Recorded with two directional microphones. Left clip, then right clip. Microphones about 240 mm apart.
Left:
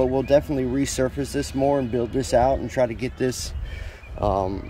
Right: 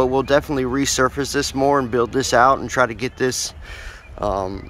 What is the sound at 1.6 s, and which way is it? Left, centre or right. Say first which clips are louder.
Speech: right 4 dB; right.